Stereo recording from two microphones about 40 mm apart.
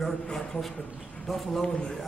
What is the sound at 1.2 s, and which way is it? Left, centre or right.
Speech, centre.